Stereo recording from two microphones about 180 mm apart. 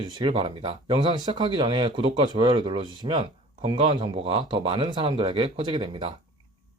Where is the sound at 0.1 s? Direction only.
25° right (ahead or behind).